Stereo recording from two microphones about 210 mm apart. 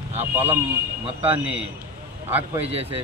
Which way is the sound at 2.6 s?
30° right (ahead or behind).